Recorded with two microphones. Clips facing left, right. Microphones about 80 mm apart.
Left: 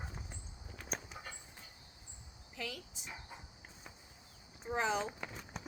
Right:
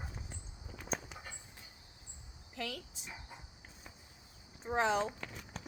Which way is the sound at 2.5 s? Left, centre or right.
Right.